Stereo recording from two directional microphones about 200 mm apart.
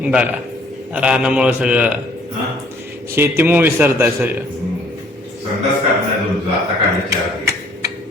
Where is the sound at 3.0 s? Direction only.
10° right (ahead or behind).